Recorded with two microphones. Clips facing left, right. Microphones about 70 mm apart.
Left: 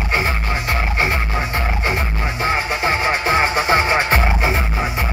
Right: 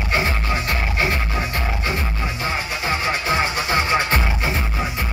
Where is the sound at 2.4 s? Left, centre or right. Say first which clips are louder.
Left 7 dB; left.